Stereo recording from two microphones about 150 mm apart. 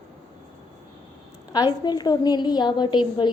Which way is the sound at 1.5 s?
25° left (ahead or behind).